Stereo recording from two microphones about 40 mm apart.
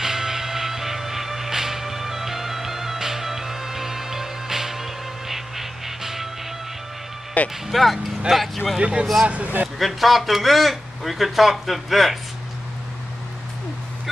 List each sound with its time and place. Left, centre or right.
0.0 s music: centre
7.6 s speech: centre
8.7 s speech: right
9.3 s speech: right
9.8 s speech: centre